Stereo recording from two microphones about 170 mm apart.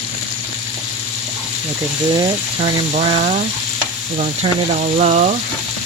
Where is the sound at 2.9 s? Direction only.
45° right (ahead or behind).